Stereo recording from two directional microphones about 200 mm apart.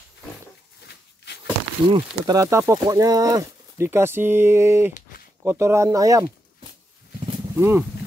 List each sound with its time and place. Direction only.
0.8 s a sound: 55° left (ahead or behind)
1.9 s speech: 20° right (ahead or behind)
7.5 s speech: 10° right (ahead or behind)